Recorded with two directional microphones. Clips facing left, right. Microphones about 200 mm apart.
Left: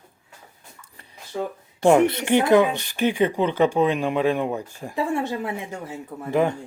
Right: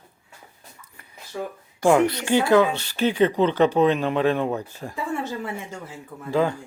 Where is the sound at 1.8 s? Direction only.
25° left (ahead or behind).